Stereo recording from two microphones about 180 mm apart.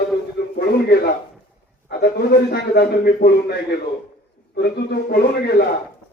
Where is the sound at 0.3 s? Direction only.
60° left (ahead or behind).